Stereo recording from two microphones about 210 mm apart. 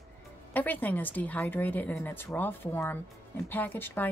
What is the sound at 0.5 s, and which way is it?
A woman's voice, 10° left (ahead or behind).